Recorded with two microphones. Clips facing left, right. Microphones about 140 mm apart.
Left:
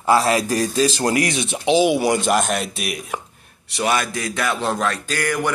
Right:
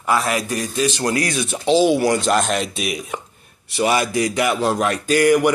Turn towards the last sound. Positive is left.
turn(degrees=-15)  # may be behind; listen again after turning